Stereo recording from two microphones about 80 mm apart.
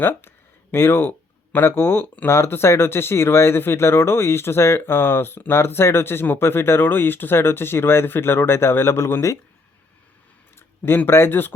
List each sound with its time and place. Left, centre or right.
0.0 s a sound: left
1.5 s speech: left
10.8 s speech: left